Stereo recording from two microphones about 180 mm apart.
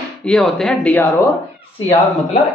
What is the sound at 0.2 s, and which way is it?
Speech, 5° left (ahead or behind).